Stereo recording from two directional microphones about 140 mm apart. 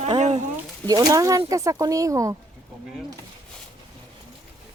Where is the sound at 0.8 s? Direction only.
25° right (ahead or behind).